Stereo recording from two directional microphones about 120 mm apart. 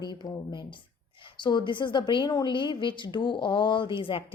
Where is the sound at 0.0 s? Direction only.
35° left (ahead or behind).